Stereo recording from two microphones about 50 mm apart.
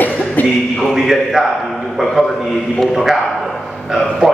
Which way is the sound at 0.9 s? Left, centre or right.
Centre.